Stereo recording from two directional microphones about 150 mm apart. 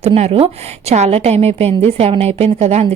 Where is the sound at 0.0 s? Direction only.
45° right (ahead or behind).